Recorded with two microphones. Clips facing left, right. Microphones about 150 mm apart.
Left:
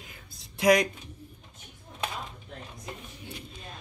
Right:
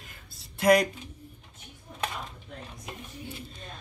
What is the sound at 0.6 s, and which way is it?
Speech, centre (ahead or behind).